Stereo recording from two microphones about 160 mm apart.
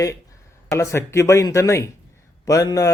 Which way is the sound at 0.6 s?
20° left (ahead or behind).